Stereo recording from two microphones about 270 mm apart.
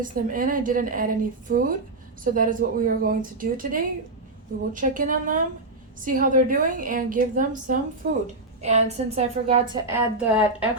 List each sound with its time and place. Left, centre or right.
0.0 s a woman's voice: right
9.8 s a woman's voice: centre